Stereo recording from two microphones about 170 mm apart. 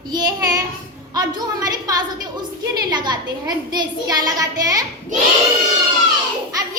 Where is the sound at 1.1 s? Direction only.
25° right (ahead or behind).